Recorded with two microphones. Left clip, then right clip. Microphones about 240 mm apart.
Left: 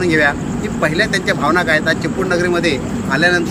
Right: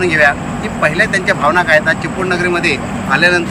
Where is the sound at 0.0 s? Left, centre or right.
Centre.